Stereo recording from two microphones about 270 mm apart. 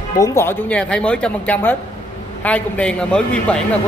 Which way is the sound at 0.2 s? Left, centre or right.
Centre.